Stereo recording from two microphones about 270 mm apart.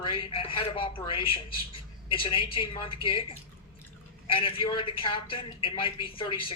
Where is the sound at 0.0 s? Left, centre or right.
Centre.